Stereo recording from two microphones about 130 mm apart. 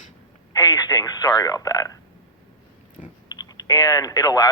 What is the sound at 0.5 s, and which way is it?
A man's voice, 30° left (ahead or behind).